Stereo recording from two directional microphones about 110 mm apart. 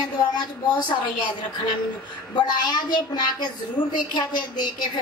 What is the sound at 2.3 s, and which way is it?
A woman's voice, 40° left (ahead or behind).